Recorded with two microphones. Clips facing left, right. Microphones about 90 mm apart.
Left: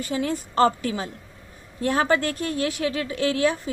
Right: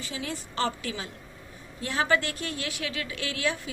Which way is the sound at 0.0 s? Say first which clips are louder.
Left 9 dB; 45° left (ahead or behind).